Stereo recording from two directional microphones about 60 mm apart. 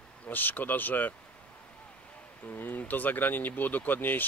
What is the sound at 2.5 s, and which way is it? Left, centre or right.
Speech, left.